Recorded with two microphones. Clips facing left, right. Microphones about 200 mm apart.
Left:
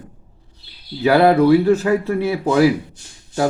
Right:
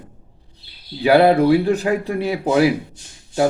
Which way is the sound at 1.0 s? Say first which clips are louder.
Even; 15° right (ahead or behind).